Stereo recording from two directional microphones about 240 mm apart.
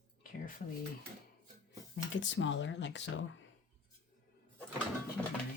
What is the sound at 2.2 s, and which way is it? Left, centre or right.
Speech, left.